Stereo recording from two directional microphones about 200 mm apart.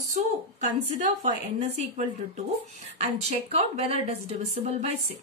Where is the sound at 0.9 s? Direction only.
35° right (ahead or behind).